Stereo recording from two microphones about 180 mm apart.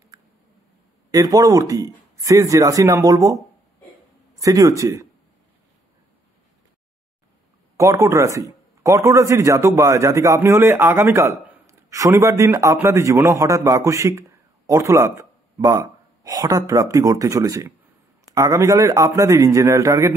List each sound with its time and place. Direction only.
0.1 s a sound: 20° right (ahead or behind)
1.1 s speech: 20° right (ahead or behind)
4.4 s speech: 20° right (ahead or behind)
7.7 s speech: 15° right (ahead or behind)